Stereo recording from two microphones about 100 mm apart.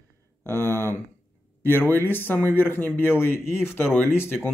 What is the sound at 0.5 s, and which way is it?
Speech, 30° right (ahead or behind).